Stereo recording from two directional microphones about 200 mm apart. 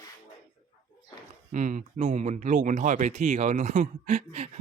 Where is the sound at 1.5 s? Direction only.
40° right (ahead or behind).